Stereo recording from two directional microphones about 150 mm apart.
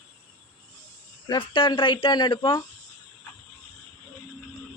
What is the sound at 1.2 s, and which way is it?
Speech, 35° left (ahead or behind).